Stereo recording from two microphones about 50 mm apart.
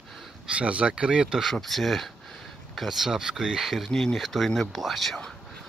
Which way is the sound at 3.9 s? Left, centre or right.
Centre.